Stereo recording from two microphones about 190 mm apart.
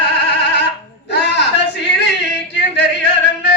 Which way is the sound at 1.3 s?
65° left (ahead or behind).